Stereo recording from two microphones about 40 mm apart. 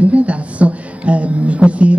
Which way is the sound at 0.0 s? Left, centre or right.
Right.